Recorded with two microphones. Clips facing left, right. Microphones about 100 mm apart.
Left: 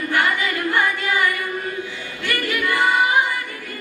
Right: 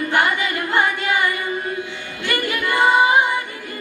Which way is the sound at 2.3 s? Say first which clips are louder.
Right 1 dB; 25° right (ahead or behind).